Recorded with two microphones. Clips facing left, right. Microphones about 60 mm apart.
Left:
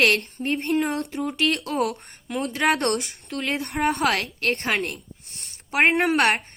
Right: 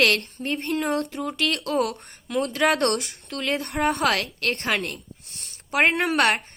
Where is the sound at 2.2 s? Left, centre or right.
Centre.